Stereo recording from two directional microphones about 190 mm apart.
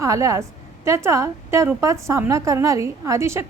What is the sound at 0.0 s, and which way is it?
A woman's voice, 15° right (ahead or behind).